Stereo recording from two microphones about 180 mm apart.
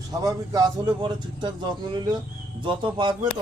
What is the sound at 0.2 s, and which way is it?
A man's voice, 20° right (ahead or behind).